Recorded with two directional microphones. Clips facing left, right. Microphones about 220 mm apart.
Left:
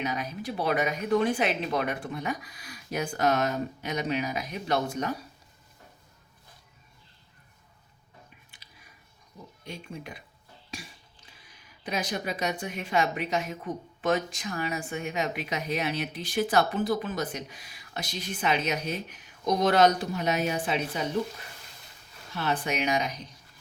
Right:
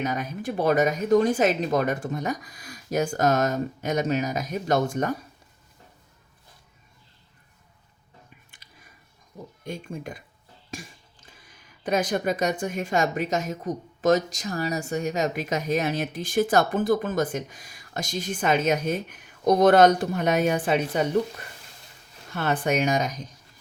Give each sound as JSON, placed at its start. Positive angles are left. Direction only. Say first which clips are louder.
{"t": 0.0, "sound": "speech", "louder": "right 4 dB", "side_deg": -50}
{"t": 9.6, "sound": "speech", "louder": "right 6 dB", "side_deg": -50}
{"t": 10.7, "sound": "a sound", "louder": "right 4 dB", "side_deg": -50}
{"t": 11.8, "sound": "speech", "louder": "right 7 dB", "side_deg": -50}
{"t": 22.4, "sound": "speech", "louder": "right 5 dB", "side_deg": -50}